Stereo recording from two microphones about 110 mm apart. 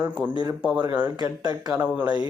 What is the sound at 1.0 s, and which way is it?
Speech, 40° right (ahead or behind).